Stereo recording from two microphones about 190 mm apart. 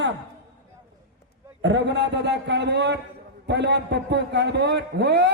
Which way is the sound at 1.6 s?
65° right (ahead or behind).